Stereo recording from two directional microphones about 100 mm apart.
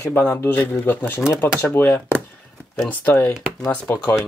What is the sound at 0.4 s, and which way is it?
Speech, 20° left (ahead or behind).